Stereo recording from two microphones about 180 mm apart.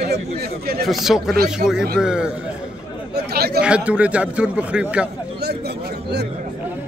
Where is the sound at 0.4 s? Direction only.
60° right (ahead or behind).